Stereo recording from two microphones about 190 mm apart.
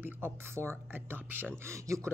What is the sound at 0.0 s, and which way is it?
Speech, 10° right (ahead or behind).